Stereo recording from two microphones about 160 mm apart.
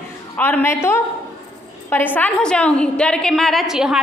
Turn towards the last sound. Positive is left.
turn(degrees=-5)  # may be behind; listen again after turning